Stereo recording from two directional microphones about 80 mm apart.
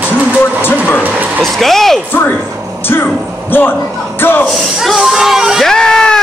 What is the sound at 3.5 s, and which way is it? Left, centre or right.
Speech, left.